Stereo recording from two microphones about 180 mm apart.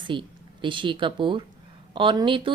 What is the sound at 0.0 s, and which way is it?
Speech, 25° right (ahead or behind).